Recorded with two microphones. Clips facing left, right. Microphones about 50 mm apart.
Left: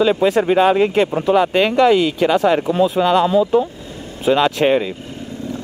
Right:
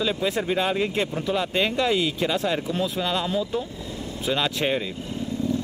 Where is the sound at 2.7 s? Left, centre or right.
Left.